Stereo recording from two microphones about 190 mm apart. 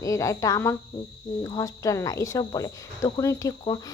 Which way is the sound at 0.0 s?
15° left (ahead or behind).